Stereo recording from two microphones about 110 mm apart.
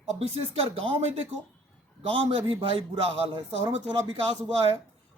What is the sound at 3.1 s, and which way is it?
Speech, 65° right (ahead or behind).